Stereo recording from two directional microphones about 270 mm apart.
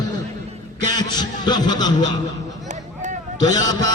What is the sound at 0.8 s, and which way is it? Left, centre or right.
Speech, centre.